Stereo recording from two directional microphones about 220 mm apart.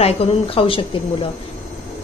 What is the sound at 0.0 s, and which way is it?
Speech, 25° left (ahead or behind).